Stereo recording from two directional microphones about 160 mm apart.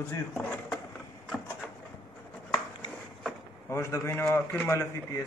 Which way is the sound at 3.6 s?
15° left (ahead or behind).